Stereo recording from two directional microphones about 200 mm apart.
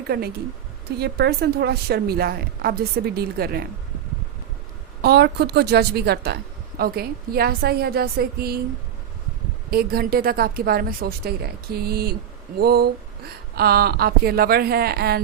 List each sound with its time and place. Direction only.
0.9 s a woman's voice: 55° right (ahead or behind)
5.0 s a woman's voice: 55° right (ahead or behind)
9.6 s a woman's voice: 50° right (ahead or behind)